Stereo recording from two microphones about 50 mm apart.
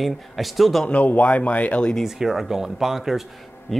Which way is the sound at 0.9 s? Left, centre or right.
Left.